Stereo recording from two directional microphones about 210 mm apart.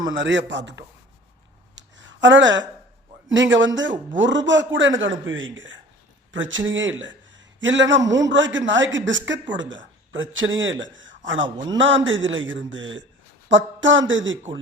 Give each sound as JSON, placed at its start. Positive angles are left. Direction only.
{"t": 0.1, "sound": "speech", "side_deg": -60}
{"t": 1.7, "sound": "a sound", "side_deg": -60}
{"t": 3.2, "sound": "speech", "side_deg": -65}
{"t": 11.4, "sound": "speech", "side_deg": -20}
{"t": 11.8, "sound": "speech", "side_deg": -65}
{"t": 13.5, "sound": "a sound", "side_deg": -65}
{"t": 14.1, "sound": "speech", "side_deg": -65}